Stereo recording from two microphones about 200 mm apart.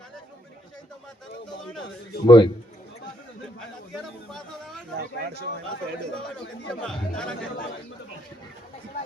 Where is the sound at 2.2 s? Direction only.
20° left (ahead or behind).